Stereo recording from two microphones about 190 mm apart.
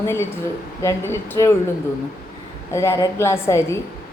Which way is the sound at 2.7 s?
15° left (ahead or behind).